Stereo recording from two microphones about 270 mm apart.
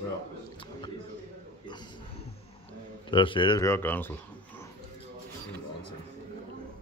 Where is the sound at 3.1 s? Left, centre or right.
Centre.